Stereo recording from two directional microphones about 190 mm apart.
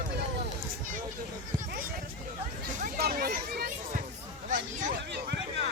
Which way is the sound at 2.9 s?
55° right (ahead or behind).